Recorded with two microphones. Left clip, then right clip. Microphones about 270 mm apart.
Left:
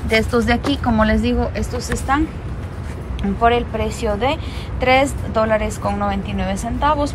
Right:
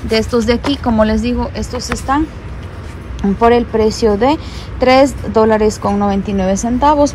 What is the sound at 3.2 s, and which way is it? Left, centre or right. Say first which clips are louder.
A woman's voice: right 5 dB; centre.